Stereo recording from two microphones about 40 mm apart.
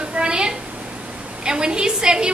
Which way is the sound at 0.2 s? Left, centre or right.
Right.